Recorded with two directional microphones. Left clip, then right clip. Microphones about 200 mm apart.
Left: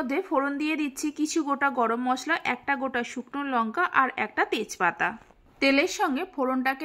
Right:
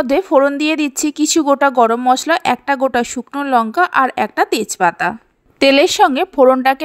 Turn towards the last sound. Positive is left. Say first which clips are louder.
# right 16 dB
turn(degrees=-40)  # may be behind; listen again after turning